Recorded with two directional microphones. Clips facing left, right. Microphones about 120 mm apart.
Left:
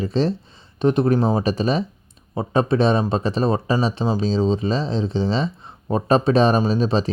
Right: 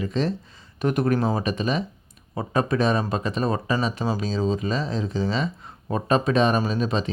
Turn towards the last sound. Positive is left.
turn(degrees=30)  # may be behind; listen again after turning